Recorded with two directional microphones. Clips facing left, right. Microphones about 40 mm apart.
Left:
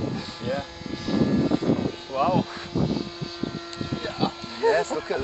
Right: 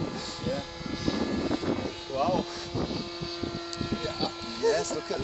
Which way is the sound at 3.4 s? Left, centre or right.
Centre.